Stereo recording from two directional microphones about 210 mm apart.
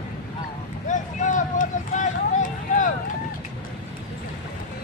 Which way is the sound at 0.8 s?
35° left (ahead or behind).